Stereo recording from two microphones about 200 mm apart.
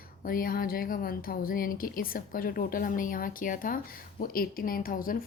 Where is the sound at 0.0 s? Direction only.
45° left (ahead or behind).